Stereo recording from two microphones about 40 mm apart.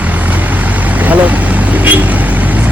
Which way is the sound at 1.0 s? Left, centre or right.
Right.